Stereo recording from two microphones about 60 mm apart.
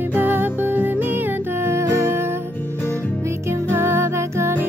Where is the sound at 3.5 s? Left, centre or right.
Right.